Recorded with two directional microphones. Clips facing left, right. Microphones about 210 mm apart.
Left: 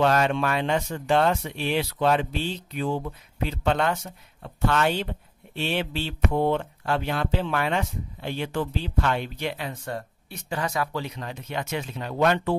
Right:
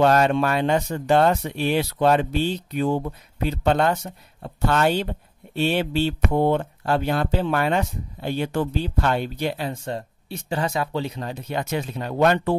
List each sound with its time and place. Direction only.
0.0 s speech: 40° right (ahead or behind)